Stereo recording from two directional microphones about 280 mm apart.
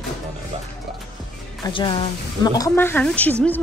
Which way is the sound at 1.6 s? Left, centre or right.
Centre.